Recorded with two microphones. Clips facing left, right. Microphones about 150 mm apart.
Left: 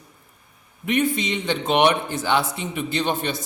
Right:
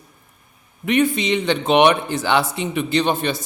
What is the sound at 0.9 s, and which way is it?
A man's voice, 90° right.